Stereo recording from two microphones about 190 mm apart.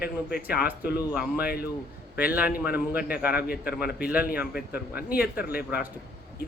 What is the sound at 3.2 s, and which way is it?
A man's voice, 10° right (ahead or behind).